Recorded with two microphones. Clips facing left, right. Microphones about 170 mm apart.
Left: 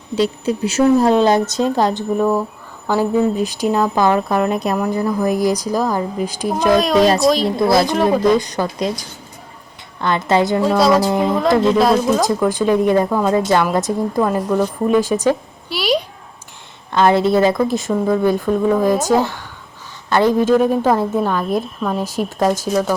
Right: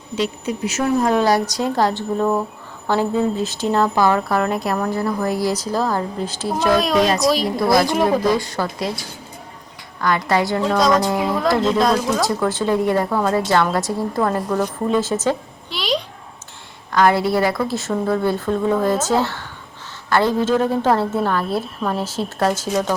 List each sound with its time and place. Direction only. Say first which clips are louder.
0.2 s speech: left 5 dB; 30° left (ahead or behind)
3.3 s speech: left 2 dB; 15° left (ahead or behind)
6.7 s speech: left 5 dB; centre (ahead or behind)
7.4 s a woman's voice: left 2 dB; 25° left (ahead or behind)
10.7 s speech: left 2 dB; 5° left (ahead or behind)
11.3 s a woman's voice: left 3 dB; 20° left (ahead or behind)
11.5 s speech: left 4 dB; 5° left (ahead or behind)
12.0 s speech: left 4 dB; 15° left (ahead or behind)
16.9 s a woman's voice: left 3 dB; 20° left (ahead or behind)